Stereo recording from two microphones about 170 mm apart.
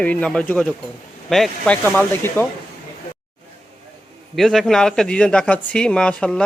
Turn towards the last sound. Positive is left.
turn(degrees=5)  # may be behind; listen again after turning